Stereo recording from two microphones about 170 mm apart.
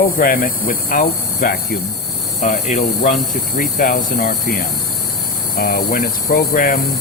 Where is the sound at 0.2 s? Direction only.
55° left (ahead or behind).